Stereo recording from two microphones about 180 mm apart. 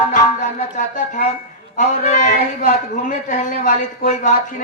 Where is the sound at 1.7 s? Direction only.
45° left (ahead or behind).